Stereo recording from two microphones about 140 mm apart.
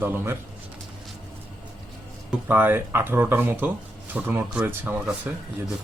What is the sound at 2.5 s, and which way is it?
A man's voice, 15° right (ahead or behind).